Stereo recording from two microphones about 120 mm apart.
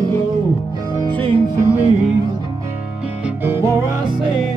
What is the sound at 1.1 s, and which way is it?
Music, 45° right (ahead or behind).